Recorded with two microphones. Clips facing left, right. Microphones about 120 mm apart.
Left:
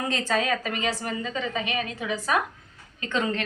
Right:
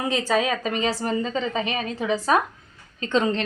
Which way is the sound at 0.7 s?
30° right (ahead or behind).